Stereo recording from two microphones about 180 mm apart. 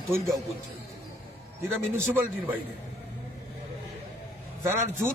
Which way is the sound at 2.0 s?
10° right (ahead or behind).